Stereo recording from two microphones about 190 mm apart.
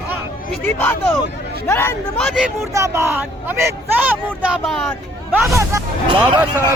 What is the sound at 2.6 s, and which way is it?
Speech, 15° right (ahead or behind).